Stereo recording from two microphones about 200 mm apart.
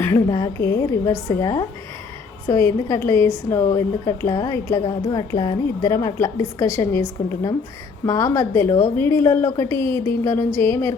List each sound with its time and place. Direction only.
0.0 s a woman's voice: 15° left (ahead or behind)